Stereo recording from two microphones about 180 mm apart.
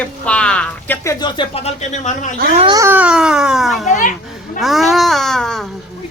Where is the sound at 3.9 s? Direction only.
45° left (ahead or behind).